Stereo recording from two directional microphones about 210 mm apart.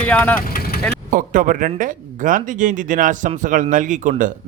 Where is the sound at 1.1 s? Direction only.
40° right (ahead or behind).